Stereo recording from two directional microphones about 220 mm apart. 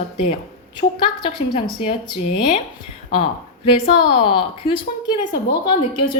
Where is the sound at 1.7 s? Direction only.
20° left (ahead or behind).